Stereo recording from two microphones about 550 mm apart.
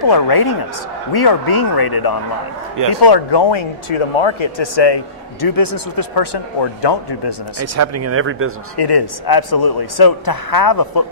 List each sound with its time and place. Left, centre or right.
0.0 s a man's voice: left
7.6 s speech: right
8.7 s a man's voice: left